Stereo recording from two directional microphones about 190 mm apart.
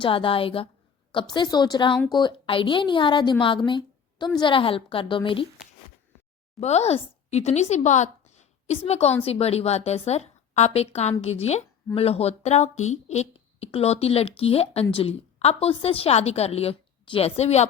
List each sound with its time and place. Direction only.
0.0 s a woman's voice: 25° left (ahead or behind)
6.6 s speech: 35° left (ahead or behind)